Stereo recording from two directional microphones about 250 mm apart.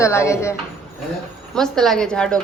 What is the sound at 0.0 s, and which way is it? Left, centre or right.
Speech, centre.